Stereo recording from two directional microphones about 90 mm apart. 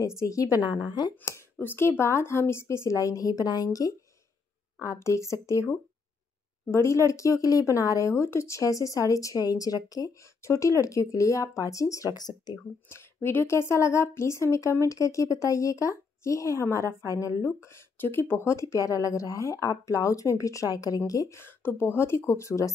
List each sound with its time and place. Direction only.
0.0 s a woman's voice: 35° left (ahead or behind)
1.2 s a woman's voice: 25° left (ahead or behind); by 10.1 s 45° left (ahead or behind)
10.4 s a woman's voice: 35° left (ahead or behind)
12.9 s a woman's voice: 25° left (ahead or behind)
21.4 s speech: 25° left (ahead or behind)